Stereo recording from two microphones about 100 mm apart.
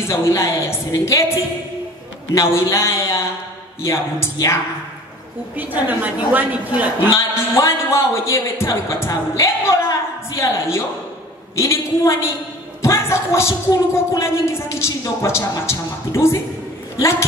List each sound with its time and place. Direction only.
0.1 s a woman's voice: 30° left (ahead or behind)
2.3 s a woman's voice: 30° left (ahead or behind)
5.6 s a woman's voice: 15° right (ahead or behind)
7.2 s a woman's voice: 30° left (ahead or behind)